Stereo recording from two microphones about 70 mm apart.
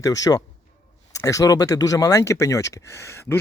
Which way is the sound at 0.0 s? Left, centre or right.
Left.